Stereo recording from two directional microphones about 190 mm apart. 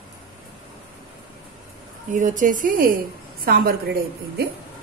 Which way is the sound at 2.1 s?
40° right (ahead or behind).